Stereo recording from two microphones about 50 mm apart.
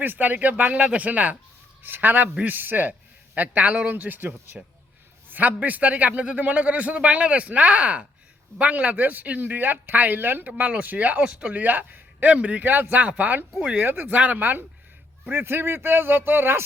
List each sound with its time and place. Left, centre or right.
0.0 s a man's voice: right
1.8 s a man's voice: right
11.2 s speech: right
11.5 s a man's voice: right
12.3 s a man's voice: right
15.2 s a man's voice: right